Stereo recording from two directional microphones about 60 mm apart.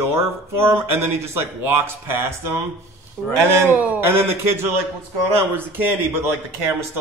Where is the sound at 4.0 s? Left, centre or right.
Right.